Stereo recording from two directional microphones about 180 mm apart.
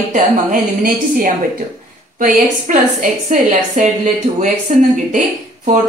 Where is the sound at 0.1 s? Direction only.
50° right (ahead or behind).